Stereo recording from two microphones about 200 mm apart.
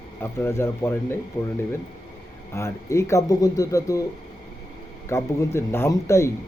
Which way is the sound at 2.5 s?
15° left (ahead or behind).